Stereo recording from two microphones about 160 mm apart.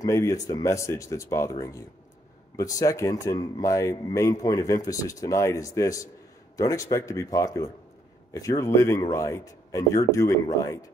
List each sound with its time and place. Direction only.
0.0 s speech: 20° left (ahead or behind)